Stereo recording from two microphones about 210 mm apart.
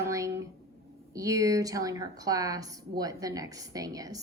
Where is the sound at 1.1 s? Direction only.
15° right (ahead or behind).